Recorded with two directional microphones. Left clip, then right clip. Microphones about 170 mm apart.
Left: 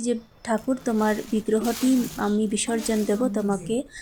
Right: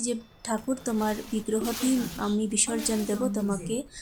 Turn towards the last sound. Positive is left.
turn(degrees=20)  # may be behind; listen again after turning